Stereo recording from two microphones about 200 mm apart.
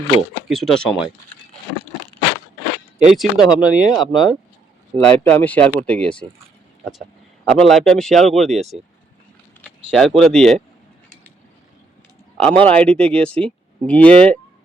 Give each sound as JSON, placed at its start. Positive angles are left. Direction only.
{"t": 0.4, "sound": "a man's voice", "side_deg": 0}
{"t": 3.0, "sound": "a man's voice", "side_deg": 0}
{"t": 4.0, "sound": "speech", "side_deg": 20}
{"t": 4.9, "sound": "speech", "side_deg": 10}
{"t": 7.4, "sound": "a man's voice", "side_deg": 0}
{"t": 9.6, "sound": "a sound", "side_deg": 0}
{"t": 10.2, "sound": "a man's voice", "side_deg": 0}
{"t": 12.4, "sound": "speech", "side_deg": 5}